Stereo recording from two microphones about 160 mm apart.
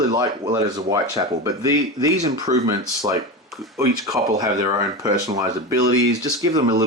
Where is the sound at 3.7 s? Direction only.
20° right (ahead or behind).